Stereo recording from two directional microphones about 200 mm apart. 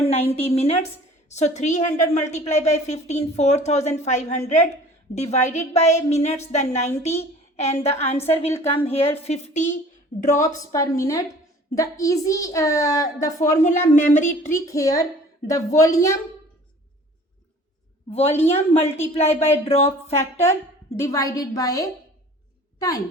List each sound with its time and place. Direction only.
0.0 s a woman's voice: 30° left (ahead or behind)
10.2 s a woman's voice: 15° left (ahead or behind)
13.9 s a woman's voice: 40° left (ahead or behind)
14.5 s a woman's voice: 15° left (ahead or behind)
18.1 s a woman's voice: 30° left (ahead or behind)
20.1 s a woman's voice: 10° left (ahead or behind)